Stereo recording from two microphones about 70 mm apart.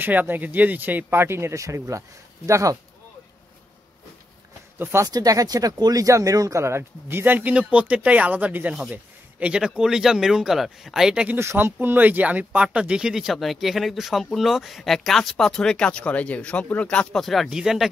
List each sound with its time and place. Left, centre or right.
0.0 s speech: right
4.7 s speech: right
5.0 s speech: right; by 11.2 s centre
11.3 s speech: right; by 17.2 s centre
17.2 s speech: centre